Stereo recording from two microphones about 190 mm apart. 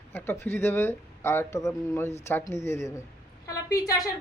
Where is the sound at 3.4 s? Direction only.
20° left (ahead or behind).